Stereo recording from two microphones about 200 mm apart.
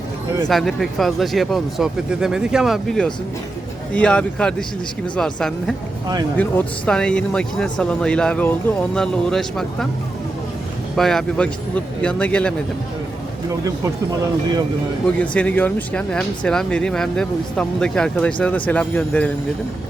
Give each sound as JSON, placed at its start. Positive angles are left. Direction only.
{"t": 0.4, "sound": "speech", "side_deg": 0}
{"t": 10.9, "sound": "speech", "side_deg": 0}
{"t": 13.5, "sound": "speech", "side_deg": -15}
{"t": 15.2, "sound": "speech", "side_deg": 5}